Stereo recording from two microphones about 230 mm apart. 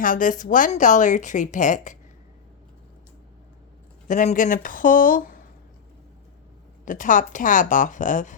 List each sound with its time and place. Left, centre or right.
0.0 s speech: left
4.1 s speech: left
6.8 s speech: left